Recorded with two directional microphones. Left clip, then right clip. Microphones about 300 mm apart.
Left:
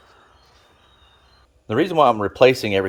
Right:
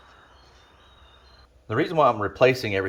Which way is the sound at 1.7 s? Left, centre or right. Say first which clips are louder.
Left 4 dB; left.